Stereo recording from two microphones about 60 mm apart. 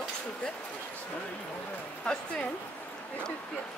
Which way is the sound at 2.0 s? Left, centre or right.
Centre.